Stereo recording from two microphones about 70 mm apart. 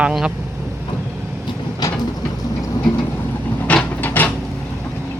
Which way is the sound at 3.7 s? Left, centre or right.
Left.